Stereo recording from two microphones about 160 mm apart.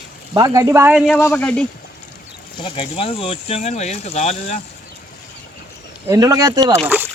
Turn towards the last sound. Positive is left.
turn(degrees=-10)  # may be behind; listen again after turning